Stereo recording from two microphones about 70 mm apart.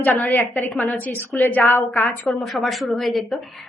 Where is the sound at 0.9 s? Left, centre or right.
Left.